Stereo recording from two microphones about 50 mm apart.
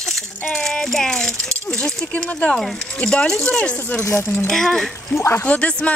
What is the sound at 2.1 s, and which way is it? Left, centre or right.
Speech, left.